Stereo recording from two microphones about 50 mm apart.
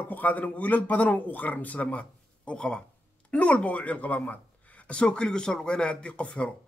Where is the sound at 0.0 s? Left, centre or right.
Left.